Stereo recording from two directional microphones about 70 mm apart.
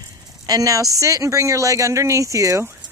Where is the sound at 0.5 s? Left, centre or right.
Right.